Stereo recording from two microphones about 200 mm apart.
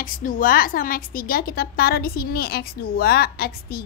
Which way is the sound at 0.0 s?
45° left (ahead or behind).